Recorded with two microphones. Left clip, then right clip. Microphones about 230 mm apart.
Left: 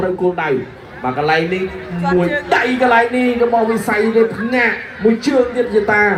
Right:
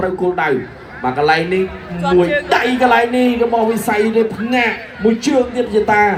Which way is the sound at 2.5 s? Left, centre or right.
Right.